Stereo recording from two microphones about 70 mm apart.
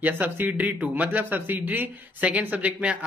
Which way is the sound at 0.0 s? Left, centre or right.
Right.